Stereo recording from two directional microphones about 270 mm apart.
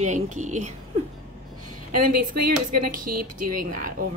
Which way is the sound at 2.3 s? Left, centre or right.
Right.